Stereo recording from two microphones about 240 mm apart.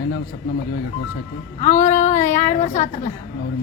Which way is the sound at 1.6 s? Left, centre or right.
Left.